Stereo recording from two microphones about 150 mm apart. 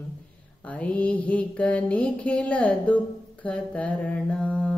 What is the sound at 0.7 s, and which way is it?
Mantra, 10° left (ahead or behind).